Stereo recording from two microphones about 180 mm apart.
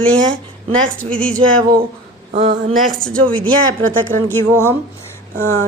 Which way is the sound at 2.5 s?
50° right (ahead or behind).